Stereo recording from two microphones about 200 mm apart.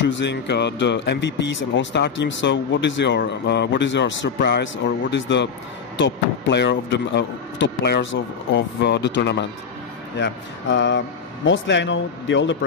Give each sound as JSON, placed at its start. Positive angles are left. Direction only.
{"t": 0.0, "sound": "speech", "side_deg": 65}